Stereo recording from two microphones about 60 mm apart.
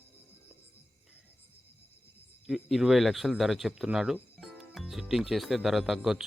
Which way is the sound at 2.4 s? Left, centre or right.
Centre.